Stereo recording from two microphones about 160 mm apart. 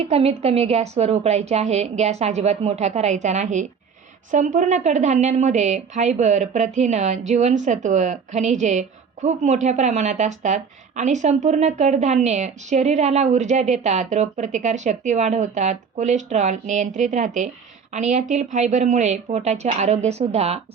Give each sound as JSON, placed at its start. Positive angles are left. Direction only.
{"t": 0.0, "sound": "a woman's voice", "side_deg": -40}